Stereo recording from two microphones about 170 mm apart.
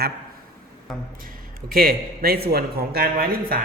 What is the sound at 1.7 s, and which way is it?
A man's voice, 60° right (ahead or behind).